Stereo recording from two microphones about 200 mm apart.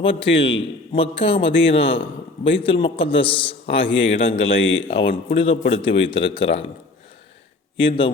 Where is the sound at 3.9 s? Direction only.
65° left (ahead or behind).